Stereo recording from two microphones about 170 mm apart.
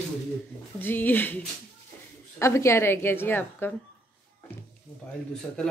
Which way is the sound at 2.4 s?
15° left (ahead or behind).